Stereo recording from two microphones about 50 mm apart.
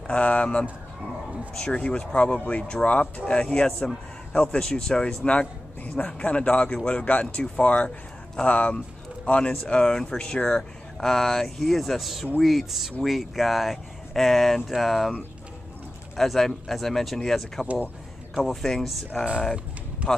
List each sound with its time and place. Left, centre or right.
0.0 s a man's voice: left; by 15.1 s centre
16.2 s speech: centre